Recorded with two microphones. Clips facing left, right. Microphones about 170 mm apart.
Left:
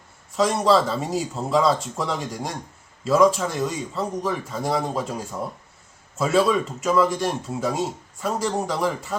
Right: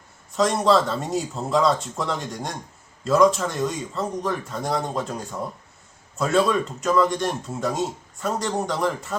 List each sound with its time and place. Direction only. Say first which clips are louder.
0.3 s speech: even; centre (ahead or behind)